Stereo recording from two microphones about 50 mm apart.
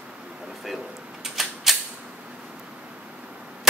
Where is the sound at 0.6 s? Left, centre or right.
Centre.